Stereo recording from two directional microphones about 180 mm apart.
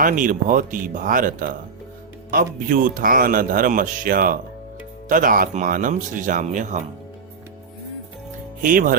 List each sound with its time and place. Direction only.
0.0 s speech: 50° right (ahead or behind)
8.6 s speech: 50° right (ahead or behind)